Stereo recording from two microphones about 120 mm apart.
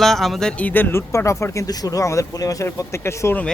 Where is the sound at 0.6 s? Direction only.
15° left (ahead or behind).